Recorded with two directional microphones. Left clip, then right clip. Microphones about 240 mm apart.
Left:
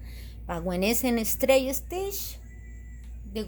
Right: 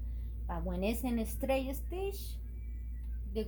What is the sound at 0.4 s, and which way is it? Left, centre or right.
A woman's voice, left.